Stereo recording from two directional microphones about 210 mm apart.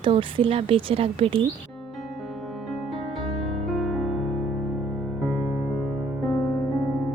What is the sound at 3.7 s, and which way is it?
Music, centre (ahead or behind).